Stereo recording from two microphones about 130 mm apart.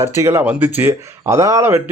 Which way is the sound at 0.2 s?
20° right (ahead or behind).